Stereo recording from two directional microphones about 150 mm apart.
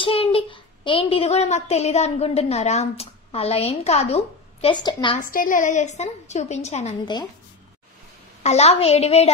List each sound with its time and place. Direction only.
0.0 s a child's voice: 40° left (ahead or behind)
5.2 s a woman's voice: 65° left (ahead or behind); by 7.0 s 45° left (ahead or behind)
8.4 s a woman's voice: 45° left (ahead or behind)